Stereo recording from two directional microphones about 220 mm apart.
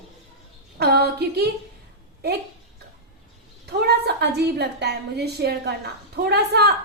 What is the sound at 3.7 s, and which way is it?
A woman's voice, 45° right (ahead or behind).